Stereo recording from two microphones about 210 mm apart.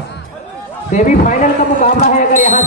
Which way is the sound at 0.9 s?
35° left (ahead or behind).